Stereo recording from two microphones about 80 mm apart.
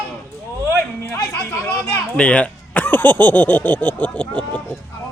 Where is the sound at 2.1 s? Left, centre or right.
Centre.